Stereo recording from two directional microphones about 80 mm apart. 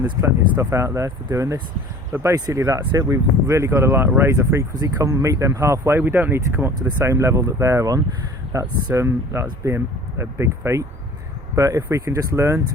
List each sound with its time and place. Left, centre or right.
0.2 s speech: right
6.0 s speech: right